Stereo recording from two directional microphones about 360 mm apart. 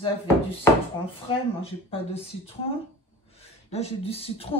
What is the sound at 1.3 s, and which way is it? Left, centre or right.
Speech, centre.